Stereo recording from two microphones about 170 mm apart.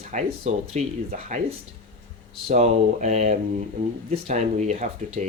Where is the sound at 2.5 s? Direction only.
40° right (ahead or behind).